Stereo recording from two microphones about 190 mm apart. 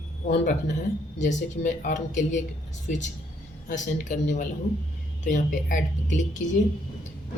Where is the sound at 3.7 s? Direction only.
40° left (ahead or behind).